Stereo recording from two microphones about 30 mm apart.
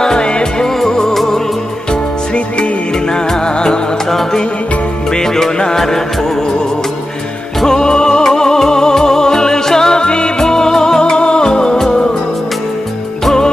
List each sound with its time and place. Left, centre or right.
0.0 s music: left
0.7 s music: centre
1.1 s music: centre
3.1 s music: left
4.1 s music: centre
7.6 s music: left
10.4 s music: centre
11.0 s music: left